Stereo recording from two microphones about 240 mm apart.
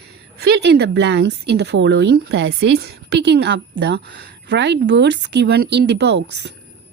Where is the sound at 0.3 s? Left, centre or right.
Right.